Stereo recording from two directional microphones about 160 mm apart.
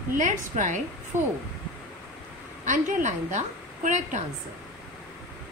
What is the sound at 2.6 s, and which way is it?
Speech, 50° right (ahead or behind).